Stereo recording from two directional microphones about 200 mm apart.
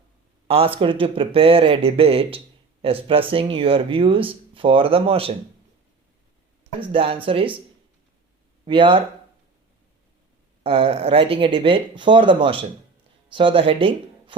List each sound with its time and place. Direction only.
0.4 s speech: 30° right (ahead or behind)
6.9 s speech: 30° right (ahead or behind)
8.6 s speech: 25° right (ahead or behind)
10.6 s speech: 25° right (ahead or behind)